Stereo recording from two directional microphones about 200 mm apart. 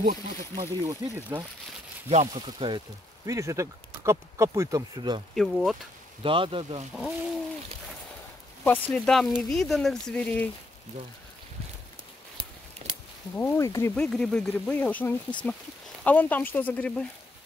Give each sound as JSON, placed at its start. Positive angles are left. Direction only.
{"t": 0.0, "sound": "speech", "side_deg": -45}
{"t": 0.8, "sound": "speech", "side_deg": -15}
{"t": 2.0, "sound": "speech", "side_deg": -30}
{"t": 5.3, "sound": "speech", "side_deg": 0}
{"t": 6.2, "sound": "speech", "side_deg": -25}
{"t": 8.6, "sound": "speech", "side_deg": 5}
{"t": 12.8, "sound": "a sound", "side_deg": -35}
{"t": 13.4, "sound": "speech", "side_deg": 10}